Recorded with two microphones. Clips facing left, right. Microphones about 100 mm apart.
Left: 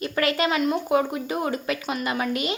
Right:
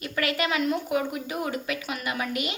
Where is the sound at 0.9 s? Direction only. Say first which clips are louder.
Left 5 dB; 35° left (ahead or behind).